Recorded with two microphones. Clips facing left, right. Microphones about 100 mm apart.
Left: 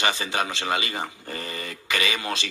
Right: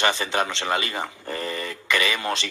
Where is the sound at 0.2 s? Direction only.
35° right (ahead or behind).